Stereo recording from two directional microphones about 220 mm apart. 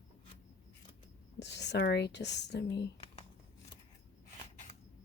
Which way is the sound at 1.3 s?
50° left (ahead or behind).